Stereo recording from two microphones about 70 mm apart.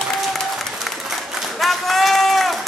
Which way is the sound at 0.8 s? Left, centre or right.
Centre.